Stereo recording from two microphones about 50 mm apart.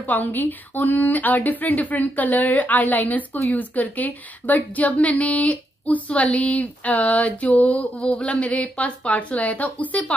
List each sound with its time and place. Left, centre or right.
0.0 s a woman's voice: left